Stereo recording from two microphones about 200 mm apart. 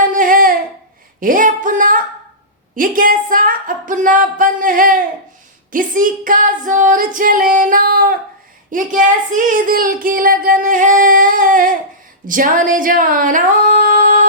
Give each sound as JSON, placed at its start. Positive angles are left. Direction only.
{"t": 0.0, "sound": "a sound", "side_deg": -40}
{"t": 1.2, "sound": "singing", "side_deg": -40}
{"t": 2.7, "sound": "speech", "side_deg": -45}
{"t": 12.2, "sound": "singing", "side_deg": -40}